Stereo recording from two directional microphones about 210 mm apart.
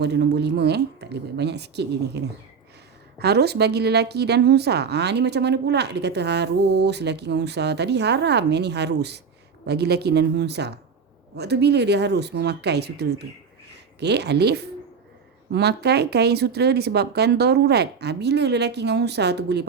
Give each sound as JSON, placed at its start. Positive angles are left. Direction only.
{"t": 0.0, "sound": "a woman's voice", "side_deg": -55}